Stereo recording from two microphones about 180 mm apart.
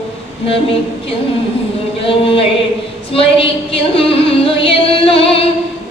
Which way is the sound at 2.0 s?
30° left (ahead or behind).